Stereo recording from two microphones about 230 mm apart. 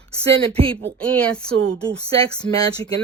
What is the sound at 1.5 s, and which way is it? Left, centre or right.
Speech, right.